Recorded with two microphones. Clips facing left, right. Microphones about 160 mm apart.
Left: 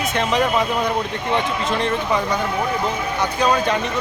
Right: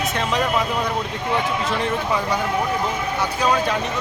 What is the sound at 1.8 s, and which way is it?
Speech, 5° right (ahead or behind).